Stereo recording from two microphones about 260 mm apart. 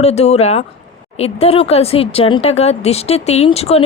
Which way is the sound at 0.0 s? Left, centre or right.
Left.